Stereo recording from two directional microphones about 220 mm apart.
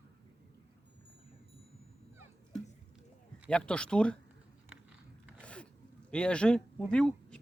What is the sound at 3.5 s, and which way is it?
Speech, 5° left (ahead or behind).